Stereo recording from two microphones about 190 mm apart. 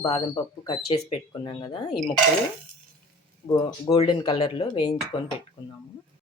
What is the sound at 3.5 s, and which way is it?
Speech, 20° left (ahead or behind).